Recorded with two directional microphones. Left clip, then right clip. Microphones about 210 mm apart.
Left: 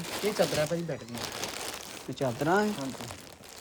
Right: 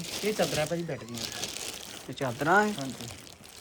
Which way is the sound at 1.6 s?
Centre (ahead or behind).